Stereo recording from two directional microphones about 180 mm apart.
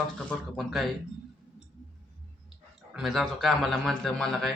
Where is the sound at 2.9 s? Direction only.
Centre (ahead or behind).